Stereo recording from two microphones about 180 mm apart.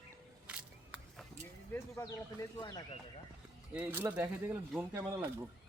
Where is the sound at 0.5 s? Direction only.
5° right (ahead or behind).